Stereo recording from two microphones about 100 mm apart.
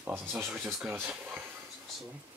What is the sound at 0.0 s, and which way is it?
Speech, 25° right (ahead or behind).